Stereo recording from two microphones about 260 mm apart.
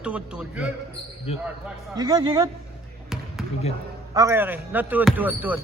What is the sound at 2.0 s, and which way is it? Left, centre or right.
Speech, centre.